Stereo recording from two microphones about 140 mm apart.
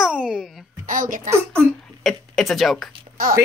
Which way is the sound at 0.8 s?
75° right (ahead or behind).